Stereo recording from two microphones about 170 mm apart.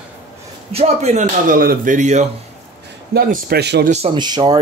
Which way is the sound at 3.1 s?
60° right (ahead or behind).